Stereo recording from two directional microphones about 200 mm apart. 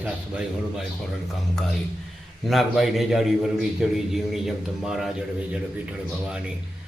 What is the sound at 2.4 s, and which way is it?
A man's voice, centre (ahead or behind).